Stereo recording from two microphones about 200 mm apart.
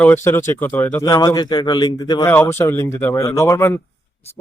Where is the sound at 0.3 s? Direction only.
10° left (ahead or behind).